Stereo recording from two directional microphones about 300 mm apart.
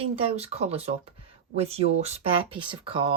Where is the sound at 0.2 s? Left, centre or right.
Centre.